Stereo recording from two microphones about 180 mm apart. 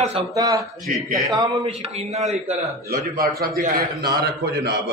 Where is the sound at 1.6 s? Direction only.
35° right (ahead or behind).